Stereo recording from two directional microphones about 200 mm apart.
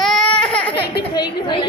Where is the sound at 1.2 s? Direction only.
25° left (ahead or behind).